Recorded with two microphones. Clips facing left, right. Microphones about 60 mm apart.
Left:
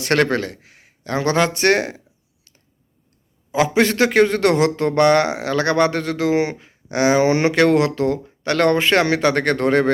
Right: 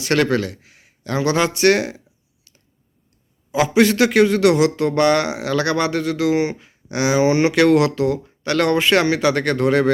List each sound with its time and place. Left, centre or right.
0.0 s a man's voice: left
3.5 s a man's voice: left